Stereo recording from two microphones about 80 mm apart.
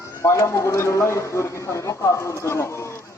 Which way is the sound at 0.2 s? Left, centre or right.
Left.